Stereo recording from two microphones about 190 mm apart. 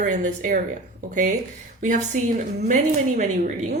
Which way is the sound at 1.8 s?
40° right (ahead or behind).